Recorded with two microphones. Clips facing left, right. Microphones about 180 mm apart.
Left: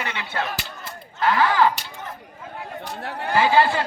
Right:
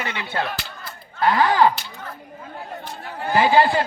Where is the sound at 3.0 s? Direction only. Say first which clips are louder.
Even; 70° left (ahead or behind).